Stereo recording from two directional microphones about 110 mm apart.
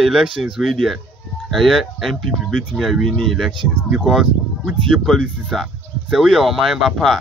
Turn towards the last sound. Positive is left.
turn(degrees=0)  # may be behind; listen again after turning